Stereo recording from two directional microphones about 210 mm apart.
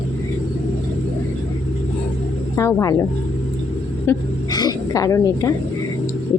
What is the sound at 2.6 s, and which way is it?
Speech, 15° left (ahead or behind).